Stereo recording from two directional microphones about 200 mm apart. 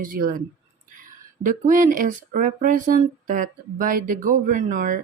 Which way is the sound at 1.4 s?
40° right (ahead or behind).